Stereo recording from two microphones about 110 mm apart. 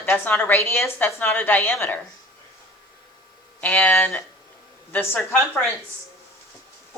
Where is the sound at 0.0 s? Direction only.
20° left (ahead or behind).